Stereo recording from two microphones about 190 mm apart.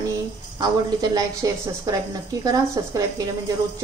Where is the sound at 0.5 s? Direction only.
20° right (ahead or behind).